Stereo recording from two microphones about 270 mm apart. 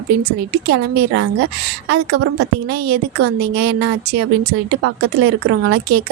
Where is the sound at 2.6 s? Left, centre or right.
Right.